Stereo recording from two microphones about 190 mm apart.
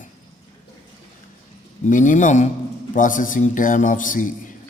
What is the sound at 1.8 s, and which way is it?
A man's voice, 40° left (ahead or behind).